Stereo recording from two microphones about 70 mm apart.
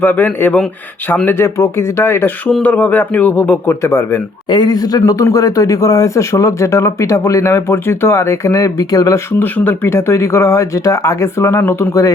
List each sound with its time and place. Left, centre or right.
0.0 s a man's voice: left
1.4 s speech: left
2.6 s a man's voice: left
3.7 s speech: left
4.4 s speech: left
5.2 s speech: left
8.5 s speech: left
9.4 s a man's voice: left
9.9 s speech: left